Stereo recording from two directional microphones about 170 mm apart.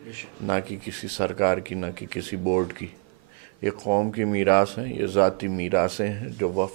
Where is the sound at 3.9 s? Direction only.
15° right (ahead or behind).